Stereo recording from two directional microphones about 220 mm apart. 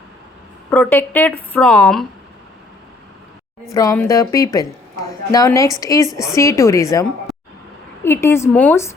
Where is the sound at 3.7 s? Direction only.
15° left (ahead or behind).